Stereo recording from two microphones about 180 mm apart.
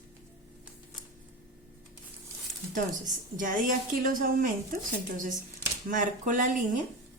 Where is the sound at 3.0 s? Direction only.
45° right (ahead or behind).